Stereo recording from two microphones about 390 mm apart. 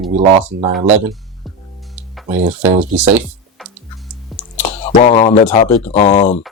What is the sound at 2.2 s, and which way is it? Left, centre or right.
Speech, centre.